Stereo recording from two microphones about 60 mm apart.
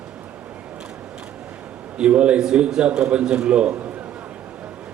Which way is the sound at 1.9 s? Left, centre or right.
Centre.